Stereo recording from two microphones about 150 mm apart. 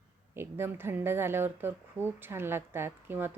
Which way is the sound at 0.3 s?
15° right (ahead or behind).